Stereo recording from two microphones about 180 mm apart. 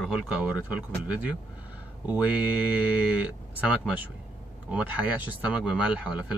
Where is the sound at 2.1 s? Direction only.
5° right (ahead or behind).